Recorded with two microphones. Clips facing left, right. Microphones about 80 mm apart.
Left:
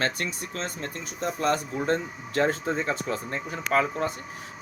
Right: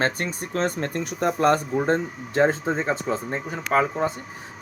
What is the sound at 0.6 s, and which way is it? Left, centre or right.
Speech, right.